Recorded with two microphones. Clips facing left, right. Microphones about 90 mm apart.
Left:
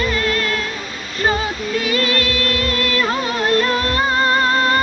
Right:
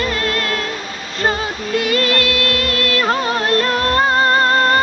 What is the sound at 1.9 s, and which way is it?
Music, 50° right (ahead or behind).